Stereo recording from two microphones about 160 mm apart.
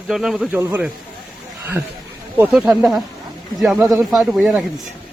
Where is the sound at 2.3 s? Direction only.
5° right (ahead or behind).